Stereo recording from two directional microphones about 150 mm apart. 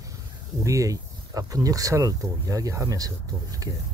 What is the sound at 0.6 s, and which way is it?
Speech, 20° right (ahead or behind).